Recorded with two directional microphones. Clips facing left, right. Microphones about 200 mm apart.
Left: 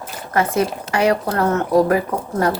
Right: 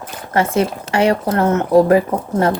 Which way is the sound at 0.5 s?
25° right (ahead or behind).